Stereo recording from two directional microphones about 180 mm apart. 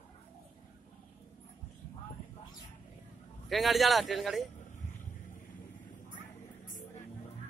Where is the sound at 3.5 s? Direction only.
Centre (ahead or behind).